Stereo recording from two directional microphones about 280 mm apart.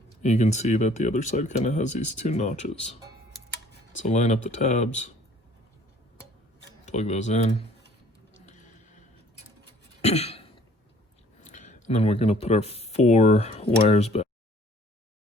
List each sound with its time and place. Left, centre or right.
0.2 s speech: left
4.0 s speech: left
6.8 s speech: left
10.0 s throat clearing: left
11.4 s speech: left